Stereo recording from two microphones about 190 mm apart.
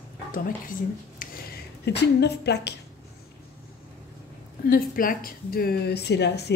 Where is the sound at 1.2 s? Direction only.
50° left (ahead or behind).